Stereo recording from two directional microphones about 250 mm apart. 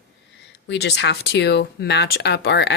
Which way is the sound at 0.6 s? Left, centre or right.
Left.